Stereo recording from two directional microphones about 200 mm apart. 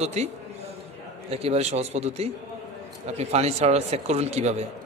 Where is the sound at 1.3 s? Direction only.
30° right (ahead or behind).